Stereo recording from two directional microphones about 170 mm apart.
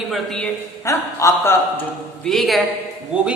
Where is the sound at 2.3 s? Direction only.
Centre (ahead or behind).